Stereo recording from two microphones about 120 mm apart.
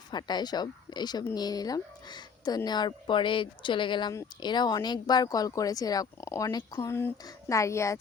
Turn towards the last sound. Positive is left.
turn(degrees=25)  # may be behind; listen again after turning